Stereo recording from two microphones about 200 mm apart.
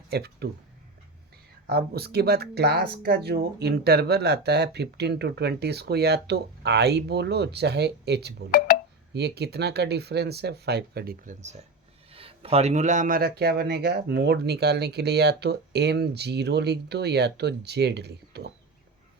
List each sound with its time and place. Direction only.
0.1 s speech: 55° right (ahead or behind)
1.6 s speech: 50° right (ahead or behind)
8.4 s telephone dialing: 45° left (ahead or behind)
9.1 s speech: 55° right (ahead or behind)